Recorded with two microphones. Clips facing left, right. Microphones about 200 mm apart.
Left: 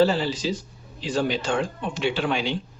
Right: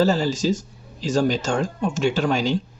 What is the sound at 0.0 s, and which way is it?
Speech, 45° right (ahead or behind).